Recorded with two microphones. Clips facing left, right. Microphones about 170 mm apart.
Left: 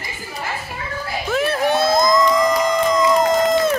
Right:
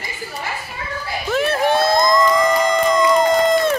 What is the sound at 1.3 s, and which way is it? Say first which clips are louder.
Crowd: right 1 dB; centre (ahead or behind).